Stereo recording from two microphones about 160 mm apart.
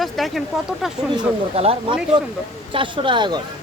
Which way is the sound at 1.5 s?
40° right (ahead or behind).